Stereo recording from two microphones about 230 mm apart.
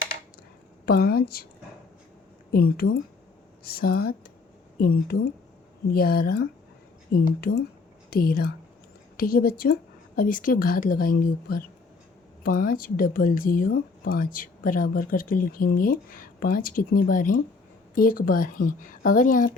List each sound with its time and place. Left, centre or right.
0.9 s a woman's voice: left
2.5 s a woman's voice: left